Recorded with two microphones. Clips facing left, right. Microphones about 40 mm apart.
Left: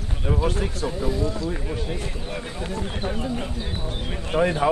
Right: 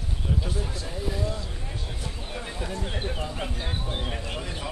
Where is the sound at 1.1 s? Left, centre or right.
Centre.